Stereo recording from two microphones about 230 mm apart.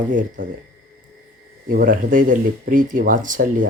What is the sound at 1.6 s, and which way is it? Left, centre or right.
Speech, right.